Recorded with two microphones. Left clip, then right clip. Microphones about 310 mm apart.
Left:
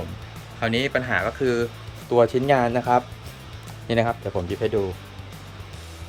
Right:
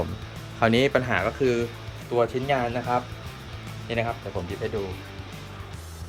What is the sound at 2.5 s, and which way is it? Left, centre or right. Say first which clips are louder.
Speech: left 5 dB; left.